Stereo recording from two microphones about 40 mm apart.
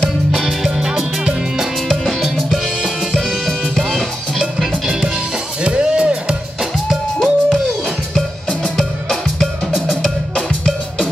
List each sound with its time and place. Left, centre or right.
0.3 s music: centre
1.9 s music: centre
5.6 s music: right
7.2 s music: centre